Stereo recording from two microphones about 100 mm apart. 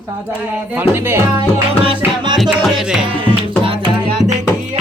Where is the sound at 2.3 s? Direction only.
Centre (ahead or behind).